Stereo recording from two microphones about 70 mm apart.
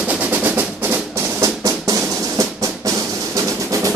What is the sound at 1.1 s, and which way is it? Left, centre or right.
Drum, right.